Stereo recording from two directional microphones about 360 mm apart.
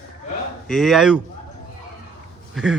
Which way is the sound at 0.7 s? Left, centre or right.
Centre.